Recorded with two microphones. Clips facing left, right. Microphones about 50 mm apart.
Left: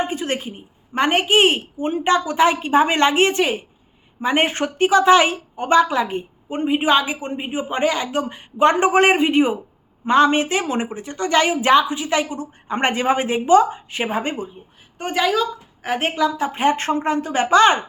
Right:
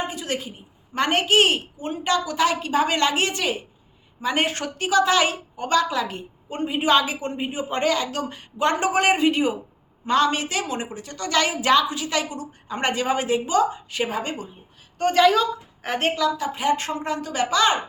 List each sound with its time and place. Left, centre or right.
0.1 s a woman's voice: left
14.9 s a woman's voice: centre
15.2 s a woman's voice: centre
16.0 s a woman's voice: centre
16.2 s a woman's voice: left